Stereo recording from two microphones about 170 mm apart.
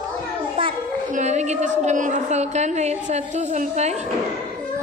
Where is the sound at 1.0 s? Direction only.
45° right (ahead or behind).